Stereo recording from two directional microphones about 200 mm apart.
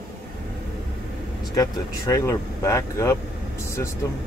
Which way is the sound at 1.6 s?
15° left (ahead or behind).